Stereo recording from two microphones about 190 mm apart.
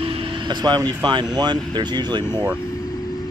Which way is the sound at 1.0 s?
20° right (ahead or behind).